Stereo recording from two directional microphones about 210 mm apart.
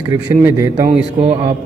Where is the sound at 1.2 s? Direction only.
25° right (ahead or behind).